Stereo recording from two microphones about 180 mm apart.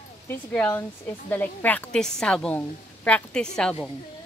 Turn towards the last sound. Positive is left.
turn(degrees=5)  # may be behind; listen again after turning